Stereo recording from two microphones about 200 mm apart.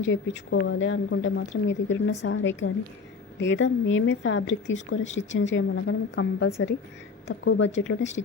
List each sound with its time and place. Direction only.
0.0 s speech: 70° left (ahead or behind)